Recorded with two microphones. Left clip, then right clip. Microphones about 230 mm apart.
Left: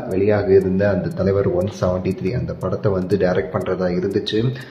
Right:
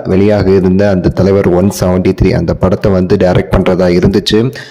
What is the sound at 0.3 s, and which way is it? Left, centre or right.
Speech, right.